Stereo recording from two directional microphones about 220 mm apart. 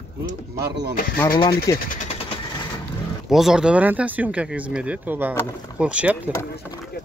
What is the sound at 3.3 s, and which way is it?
Speech, centre (ahead or behind).